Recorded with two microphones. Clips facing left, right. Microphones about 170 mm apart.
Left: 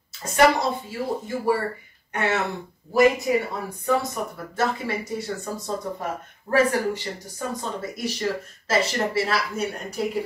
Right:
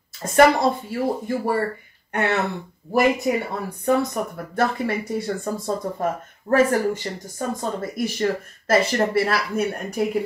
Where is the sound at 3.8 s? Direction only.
60° right (ahead or behind).